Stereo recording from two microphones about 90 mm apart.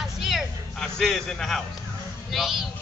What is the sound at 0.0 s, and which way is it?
Music, 5° right (ahead or behind).